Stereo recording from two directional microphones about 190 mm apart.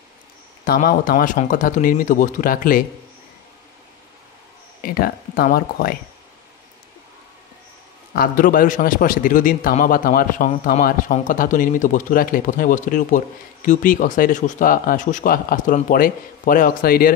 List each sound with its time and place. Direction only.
0.7 s a man's voice: 50° left (ahead or behind)
4.8 s a man's voice: 50° left (ahead or behind)
8.1 s a man's voice: 50° left (ahead or behind)